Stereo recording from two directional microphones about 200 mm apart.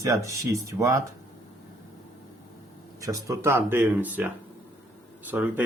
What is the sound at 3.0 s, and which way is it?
Speech, 15° right (ahead or behind).